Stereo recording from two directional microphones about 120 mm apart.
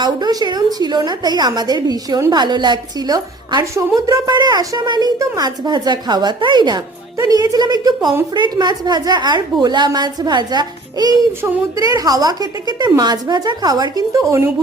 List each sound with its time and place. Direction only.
0.0 s a woman's voice: 35° right (ahead or behind)
3.6 s a woman's voice: 25° right (ahead or behind)